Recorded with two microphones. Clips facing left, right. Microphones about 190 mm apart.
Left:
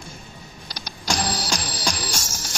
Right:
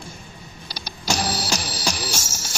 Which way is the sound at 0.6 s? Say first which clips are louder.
Right 1 dB; 10° right (ahead or behind).